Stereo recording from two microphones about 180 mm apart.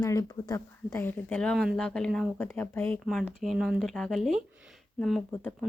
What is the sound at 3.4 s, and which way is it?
Speech, centre (ahead or behind).